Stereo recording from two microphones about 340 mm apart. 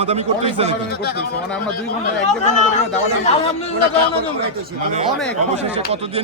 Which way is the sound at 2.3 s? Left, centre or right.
Left.